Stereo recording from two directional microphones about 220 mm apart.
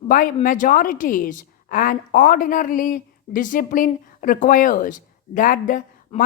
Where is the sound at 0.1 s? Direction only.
40° left (ahead or behind).